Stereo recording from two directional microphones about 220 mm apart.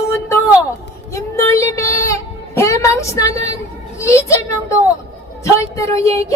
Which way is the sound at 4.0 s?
15° left (ahead or behind).